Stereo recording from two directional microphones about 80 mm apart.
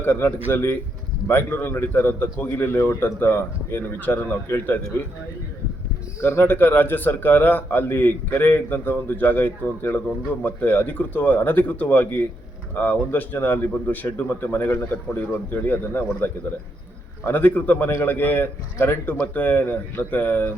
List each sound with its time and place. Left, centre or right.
0.0 s a man's voice: left
6.2 s a man's voice: left
17.3 s a man's voice: centre